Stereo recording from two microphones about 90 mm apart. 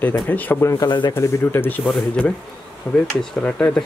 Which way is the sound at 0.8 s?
55° left (ahead or behind).